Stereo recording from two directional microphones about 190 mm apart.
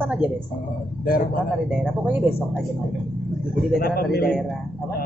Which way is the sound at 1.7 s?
10° right (ahead or behind).